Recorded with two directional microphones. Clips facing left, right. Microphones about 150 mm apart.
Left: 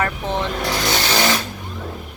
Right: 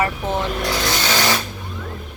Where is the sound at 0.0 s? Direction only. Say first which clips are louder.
Right 1 dB; 5° right (ahead or behind).